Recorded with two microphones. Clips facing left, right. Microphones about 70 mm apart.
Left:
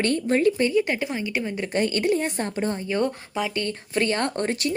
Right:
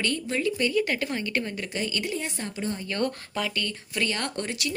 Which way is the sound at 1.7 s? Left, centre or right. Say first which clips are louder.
Left 10 dB; left.